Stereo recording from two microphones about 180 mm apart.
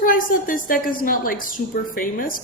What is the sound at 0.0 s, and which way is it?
A woman's voice, 50° left (ahead or behind).